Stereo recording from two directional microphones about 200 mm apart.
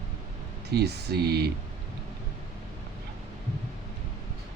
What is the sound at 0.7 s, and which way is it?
Speech, 55° right (ahead or behind).